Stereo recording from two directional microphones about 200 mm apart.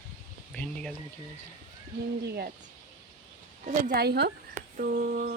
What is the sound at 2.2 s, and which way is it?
Speech, 50° right (ahead or behind).